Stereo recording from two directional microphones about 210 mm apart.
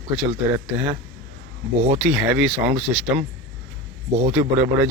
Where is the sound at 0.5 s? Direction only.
10° right (ahead or behind).